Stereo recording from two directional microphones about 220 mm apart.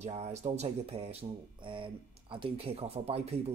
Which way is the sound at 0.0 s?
30° right (ahead or behind).